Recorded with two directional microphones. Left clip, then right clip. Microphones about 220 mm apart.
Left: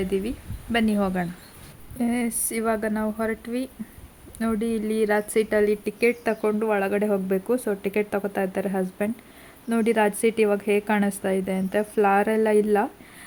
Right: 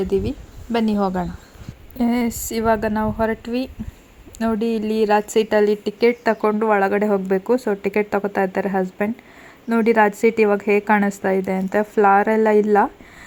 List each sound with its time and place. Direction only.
0.1 s a woman's voice: 10° right (ahead or behind)